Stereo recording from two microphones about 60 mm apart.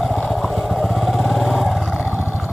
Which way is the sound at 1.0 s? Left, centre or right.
Centre.